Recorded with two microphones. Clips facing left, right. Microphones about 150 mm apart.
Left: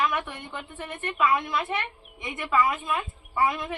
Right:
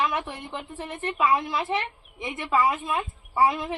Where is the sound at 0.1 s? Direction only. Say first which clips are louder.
Right 1 dB; 30° right (ahead or behind).